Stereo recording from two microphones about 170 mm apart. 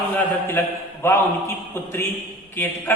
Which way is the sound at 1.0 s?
15° left (ahead or behind).